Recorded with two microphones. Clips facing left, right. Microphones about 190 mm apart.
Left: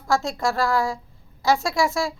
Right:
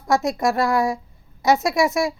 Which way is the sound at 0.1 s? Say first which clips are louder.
Right 3 dB; 20° right (ahead or behind).